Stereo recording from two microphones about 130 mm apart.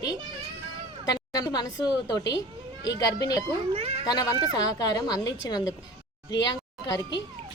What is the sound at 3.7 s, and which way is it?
Cat, 50° right (ahead or behind).